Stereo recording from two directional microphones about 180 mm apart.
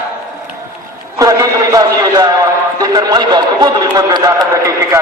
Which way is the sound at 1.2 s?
20° right (ahead or behind).